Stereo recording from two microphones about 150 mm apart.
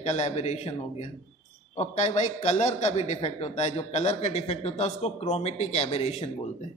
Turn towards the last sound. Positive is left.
turn(degrees=45)  # may be behind; listen again after turning